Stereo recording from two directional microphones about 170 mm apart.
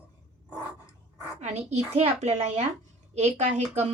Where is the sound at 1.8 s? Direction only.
40° right (ahead or behind).